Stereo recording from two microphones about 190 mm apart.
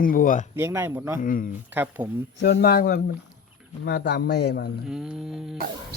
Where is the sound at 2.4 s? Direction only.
60° left (ahead or behind).